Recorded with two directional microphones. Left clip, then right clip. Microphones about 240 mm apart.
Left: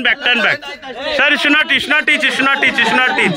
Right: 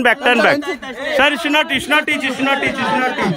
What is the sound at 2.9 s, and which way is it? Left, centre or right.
Speech, left.